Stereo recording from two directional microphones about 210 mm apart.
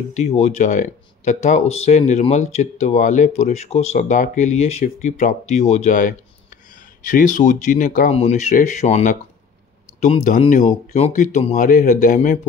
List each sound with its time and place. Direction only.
0.1 s speech: 30° left (ahead or behind)